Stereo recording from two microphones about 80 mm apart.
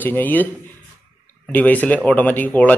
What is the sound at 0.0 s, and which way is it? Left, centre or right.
Speech, left.